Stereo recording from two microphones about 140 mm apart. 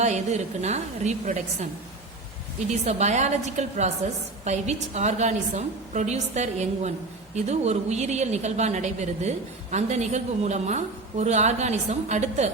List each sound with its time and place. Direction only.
0.0 s a woman's voice: 55° right (ahead or behind)
2.8 s a woman's voice: 55° right (ahead or behind)